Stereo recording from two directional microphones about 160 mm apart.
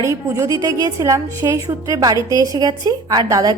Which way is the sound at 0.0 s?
20° right (ahead or behind).